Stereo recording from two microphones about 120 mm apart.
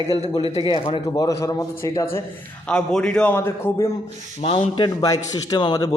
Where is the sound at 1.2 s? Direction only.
25° left (ahead or behind).